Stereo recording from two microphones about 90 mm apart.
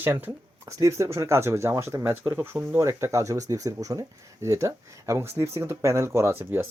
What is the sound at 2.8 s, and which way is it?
Speech, 30° right (ahead or behind).